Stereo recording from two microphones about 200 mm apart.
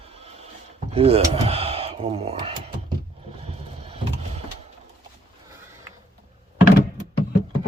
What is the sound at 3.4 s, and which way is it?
Vehicle, 30° right (ahead or behind).